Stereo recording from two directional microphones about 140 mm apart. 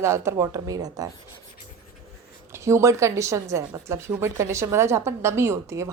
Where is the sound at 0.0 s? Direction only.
20° right (ahead or behind).